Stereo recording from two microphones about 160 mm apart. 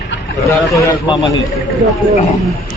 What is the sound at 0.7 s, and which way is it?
Speech, 20° left (ahead or behind).